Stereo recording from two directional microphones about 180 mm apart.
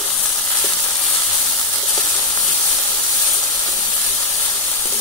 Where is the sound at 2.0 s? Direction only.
20° left (ahead or behind).